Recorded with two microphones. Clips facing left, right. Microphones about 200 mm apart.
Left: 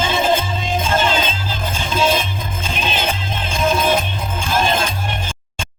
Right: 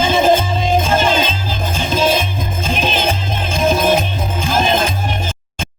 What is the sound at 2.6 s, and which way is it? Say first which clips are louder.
Music: right 4 dB; 45° right (ahead or behind).